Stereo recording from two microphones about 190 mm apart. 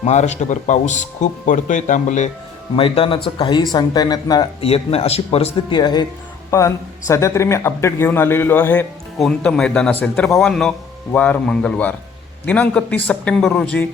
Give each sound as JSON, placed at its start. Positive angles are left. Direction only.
{"t": 0.0, "sound": "speech", "side_deg": 35}
{"t": 2.7, "sound": "speech", "side_deg": 30}